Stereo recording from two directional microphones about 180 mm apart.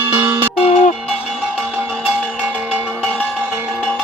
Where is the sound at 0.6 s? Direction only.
40° left (ahead or behind).